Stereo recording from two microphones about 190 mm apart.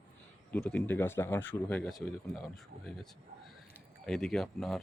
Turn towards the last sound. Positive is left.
turn(degrees=0)  # may be behind; listen again after turning